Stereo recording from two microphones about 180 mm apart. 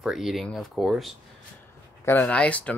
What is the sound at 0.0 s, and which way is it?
Speech, centre (ahead or behind).